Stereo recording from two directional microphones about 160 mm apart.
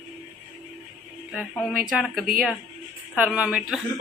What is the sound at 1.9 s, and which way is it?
A woman's voice, centre (ahead or behind).